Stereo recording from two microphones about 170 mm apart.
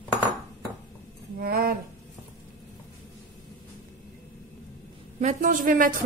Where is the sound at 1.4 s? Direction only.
60° right (ahead or behind).